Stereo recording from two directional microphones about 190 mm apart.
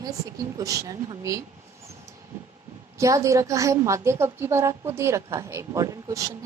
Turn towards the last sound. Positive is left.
turn(degrees=-20)  # may be behind; listen again after turning